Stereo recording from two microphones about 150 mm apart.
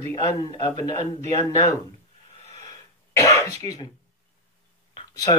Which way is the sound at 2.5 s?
25° left (ahead or behind).